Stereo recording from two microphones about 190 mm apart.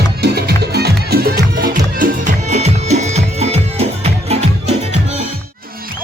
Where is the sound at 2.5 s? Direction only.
35° right (ahead or behind).